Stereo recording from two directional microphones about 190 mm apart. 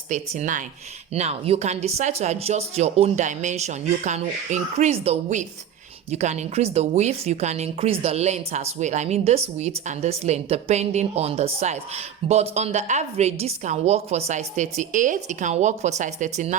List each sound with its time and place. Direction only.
0.1 s a woman's voice: 40° right (ahead or behind)